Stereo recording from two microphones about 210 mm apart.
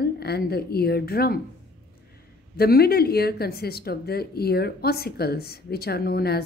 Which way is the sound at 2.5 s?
45° left (ahead or behind).